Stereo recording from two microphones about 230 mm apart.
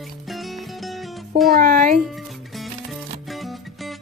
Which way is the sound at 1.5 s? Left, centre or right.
Right.